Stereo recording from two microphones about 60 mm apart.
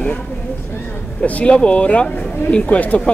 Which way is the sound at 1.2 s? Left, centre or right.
Left.